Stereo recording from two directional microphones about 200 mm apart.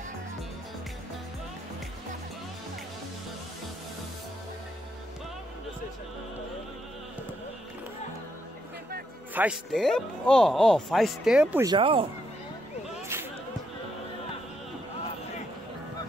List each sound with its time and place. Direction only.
9.3 s speech: 5° right (ahead or behind)
11.6 s speech: 25° right (ahead or behind)
13.1 s a sound: 10° right (ahead or behind)